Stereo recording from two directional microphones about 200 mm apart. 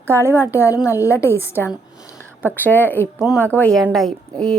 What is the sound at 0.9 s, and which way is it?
A woman's voice, 15° left (ahead or behind).